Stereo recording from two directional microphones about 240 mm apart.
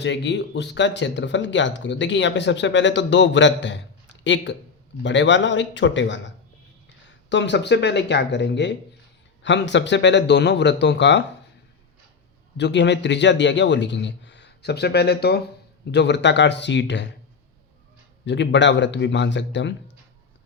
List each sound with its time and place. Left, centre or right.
0.0 s speech: left
12.5 s speech: left
18.3 s speech: left